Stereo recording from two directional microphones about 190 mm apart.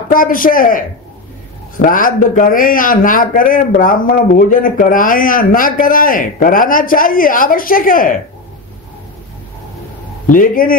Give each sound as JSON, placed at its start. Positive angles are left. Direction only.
{"t": 0.1, "sound": "speech", "side_deg": 45}
{"t": 10.3, "sound": "speech", "side_deg": 45}